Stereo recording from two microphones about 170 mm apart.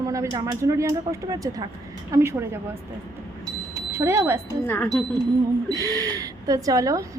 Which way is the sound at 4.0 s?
15° right (ahead or behind).